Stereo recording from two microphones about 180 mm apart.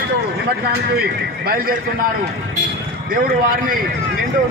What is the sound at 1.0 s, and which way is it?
Speech, 55° right (ahead or behind).